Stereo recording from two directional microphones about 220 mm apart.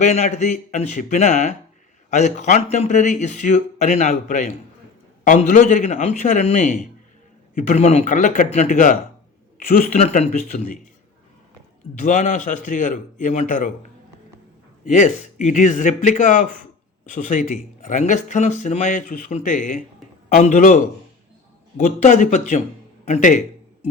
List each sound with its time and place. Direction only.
0.0 s speech: 30° left (ahead or behind)
11.9 s speech: 35° left (ahead or behind)
14.8 s speech: 35° left (ahead or behind)
21.8 s speech: 35° left (ahead or behind)